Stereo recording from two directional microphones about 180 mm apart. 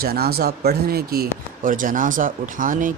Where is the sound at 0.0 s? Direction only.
60° right (ahead or behind).